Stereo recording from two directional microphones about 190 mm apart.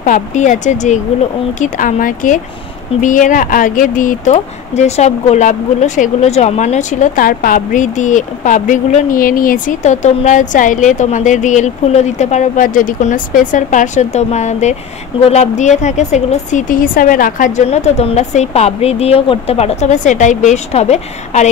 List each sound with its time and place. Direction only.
0.0 s speech: 40° left (ahead or behind)